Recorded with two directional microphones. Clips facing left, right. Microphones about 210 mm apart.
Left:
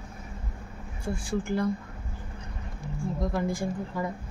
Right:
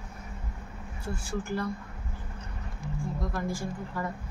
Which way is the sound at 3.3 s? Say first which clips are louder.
Left 4 dB; 15° left (ahead or behind).